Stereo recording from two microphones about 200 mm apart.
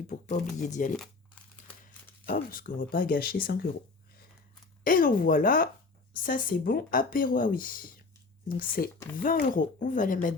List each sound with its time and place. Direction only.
0.7 s speech: 40° left (ahead or behind)
1.4 s crumpling: 5° left (ahead or behind)
2.2 s speech: 45° left (ahead or behind)
4.8 s speech: 45° left (ahead or behind)